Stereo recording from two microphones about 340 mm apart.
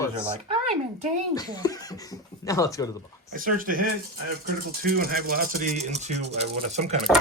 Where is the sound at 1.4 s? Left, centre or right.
Centre.